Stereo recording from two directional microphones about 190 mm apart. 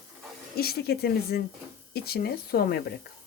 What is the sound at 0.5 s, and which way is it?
A woman's voice, 55° left (ahead or behind).